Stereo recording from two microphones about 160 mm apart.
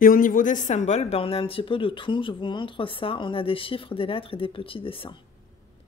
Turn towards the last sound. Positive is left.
turn(degrees=35)  # may be behind; listen again after turning